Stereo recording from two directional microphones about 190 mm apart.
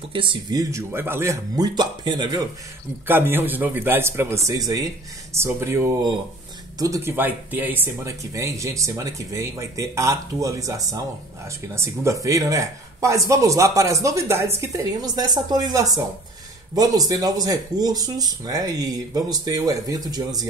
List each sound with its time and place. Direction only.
0.1 s speech: 25° right (ahead or behind)
3.1 s speech: 10° right (ahead or behind)